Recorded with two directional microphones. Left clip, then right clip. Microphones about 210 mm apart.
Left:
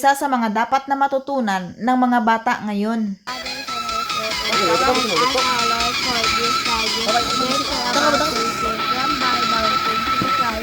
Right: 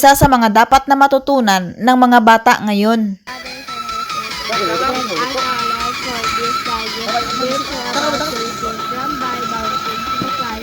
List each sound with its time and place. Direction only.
0.0 s speech: 45° right (ahead or behind)
4.5 s speech: 15° right (ahead or behind)
9.0 s music: 20° right (ahead or behind)